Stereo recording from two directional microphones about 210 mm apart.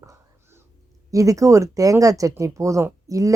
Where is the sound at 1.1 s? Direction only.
15° right (ahead or behind).